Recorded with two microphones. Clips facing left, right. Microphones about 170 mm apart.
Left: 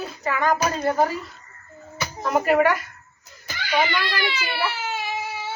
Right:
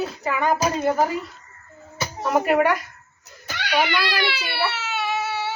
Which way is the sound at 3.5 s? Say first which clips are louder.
Right 1 dB; 75° right (ahead or behind).